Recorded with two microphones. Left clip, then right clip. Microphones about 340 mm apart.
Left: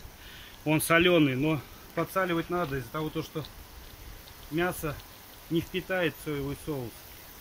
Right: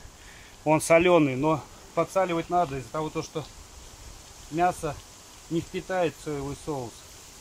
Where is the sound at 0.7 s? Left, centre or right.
Centre.